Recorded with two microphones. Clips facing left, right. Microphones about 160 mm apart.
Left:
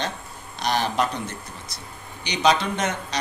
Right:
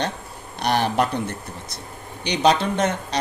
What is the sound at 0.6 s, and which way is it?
A man's voice, 60° right (ahead or behind).